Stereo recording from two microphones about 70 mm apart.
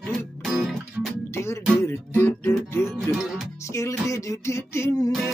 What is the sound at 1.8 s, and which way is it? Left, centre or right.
Music, left.